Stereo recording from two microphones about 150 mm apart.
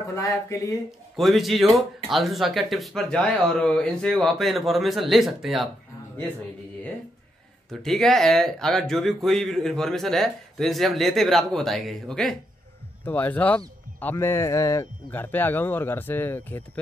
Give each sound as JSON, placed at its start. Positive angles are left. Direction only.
{"t": 0.1, "sound": "speech", "side_deg": 20}
{"t": 1.1, "sound": "speech", "side_deg": 0}
{"t": 7.8, "sound": "speech", "side_deg": 0}